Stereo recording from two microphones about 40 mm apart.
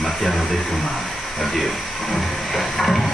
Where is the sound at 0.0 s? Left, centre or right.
Centre.